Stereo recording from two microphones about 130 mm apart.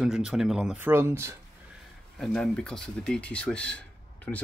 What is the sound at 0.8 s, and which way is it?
Speech, 20° right (ahead or behind).